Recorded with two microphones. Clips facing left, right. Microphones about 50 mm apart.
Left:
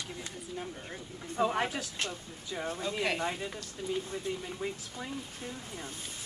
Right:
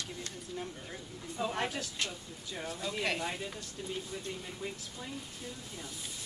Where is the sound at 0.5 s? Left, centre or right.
Centre.